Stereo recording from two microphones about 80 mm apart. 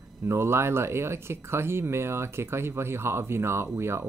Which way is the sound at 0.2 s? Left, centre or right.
Right.